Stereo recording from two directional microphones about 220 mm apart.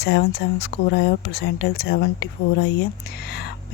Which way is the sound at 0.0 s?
50° left (ahead or behind).